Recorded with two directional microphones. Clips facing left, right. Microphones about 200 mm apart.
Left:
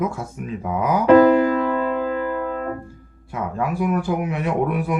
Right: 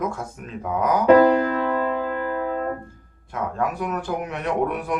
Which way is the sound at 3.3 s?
5° left (ahead or behind).